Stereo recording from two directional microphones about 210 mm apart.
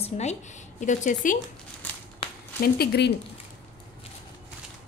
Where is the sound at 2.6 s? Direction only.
50° left (ahead or behind).